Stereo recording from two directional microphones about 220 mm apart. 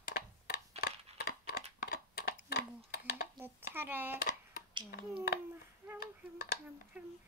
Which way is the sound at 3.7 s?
10° right (ahead or behind).